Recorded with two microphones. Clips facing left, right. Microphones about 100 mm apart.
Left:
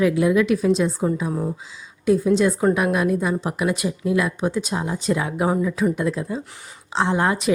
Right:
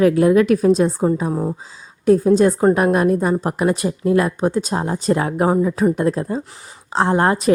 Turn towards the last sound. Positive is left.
turn(degrees=-45)  # may be behind; listen again after turning